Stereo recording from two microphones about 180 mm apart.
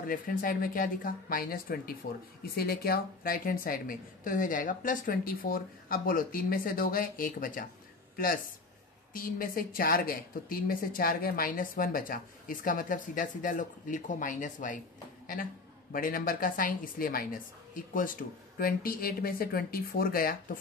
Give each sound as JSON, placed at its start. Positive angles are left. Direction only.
{"t": 0.0, "sound": "a woman's voice", "side_deg": 50}
{"t": 9.1, "sound": "a woman's voice", "side_deg": 55}
{"t": 15.9, "sound": "a woman's voice", "side_deg": 50}